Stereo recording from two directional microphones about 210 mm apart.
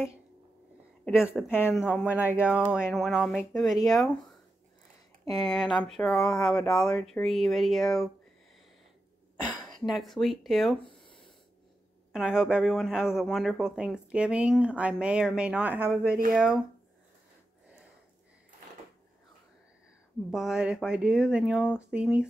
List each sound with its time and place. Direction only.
1.0 s speech: 5° right (ahead or behind)
1.5 s speech: 10° left (ahead or behind)
1.9 s speech: 5° right (ahead or behind)
9.7 s speech: centre (ahead or behind)
10.8 s a sound: 25° left (ahead or behind)
12.1 s speech: 5° right (ahead or behind)
20.2 s speech: centre (ahead or behind)